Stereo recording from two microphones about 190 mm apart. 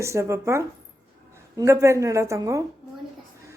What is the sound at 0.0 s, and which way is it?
A woman's voice, 15° right (ahead or behind).